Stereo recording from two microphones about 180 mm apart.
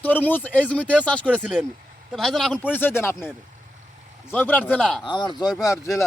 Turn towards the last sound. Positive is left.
turn(degrees=20)  # may be behind; listen again after turning